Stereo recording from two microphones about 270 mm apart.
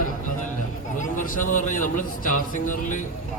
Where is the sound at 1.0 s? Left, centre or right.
Left.